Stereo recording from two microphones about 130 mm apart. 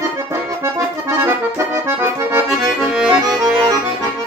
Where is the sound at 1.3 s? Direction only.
20° right (ahead or behind).